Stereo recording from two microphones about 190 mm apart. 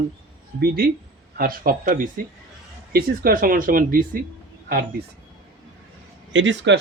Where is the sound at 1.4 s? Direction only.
50° right (ahead or behind).